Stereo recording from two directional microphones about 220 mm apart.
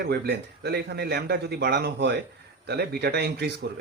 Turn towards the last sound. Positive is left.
turn(degrees=-45)  # may be behind; listen again after turning